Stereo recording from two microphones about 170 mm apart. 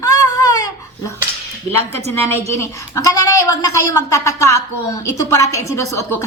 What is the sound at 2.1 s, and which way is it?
Speech, 15° left (ahead or behind).